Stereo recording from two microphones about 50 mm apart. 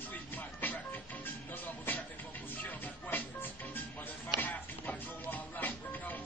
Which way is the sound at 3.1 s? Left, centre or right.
Left.